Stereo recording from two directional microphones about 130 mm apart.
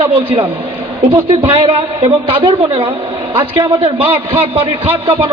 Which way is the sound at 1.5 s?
40° right (ahead or behind).